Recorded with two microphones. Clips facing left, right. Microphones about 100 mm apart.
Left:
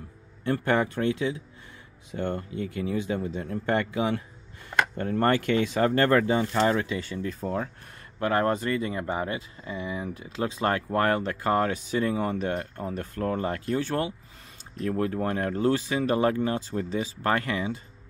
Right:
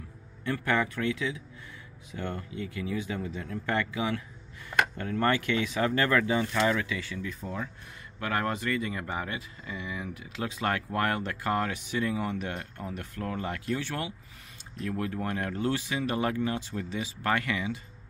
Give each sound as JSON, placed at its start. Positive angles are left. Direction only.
{"t": 0.5, "sound": "speech", "side_deg": 35}
{"t": 8.2, "sound": "speech", "side_deg": 30}